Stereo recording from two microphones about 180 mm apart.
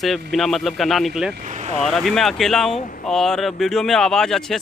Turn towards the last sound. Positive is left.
turn(degrees=5)  # may be behind; listen again after turning